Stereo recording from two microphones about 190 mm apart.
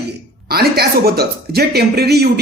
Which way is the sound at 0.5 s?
55° right (ahead or behind).